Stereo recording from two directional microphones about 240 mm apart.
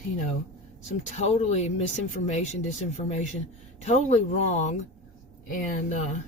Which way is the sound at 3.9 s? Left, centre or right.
Left.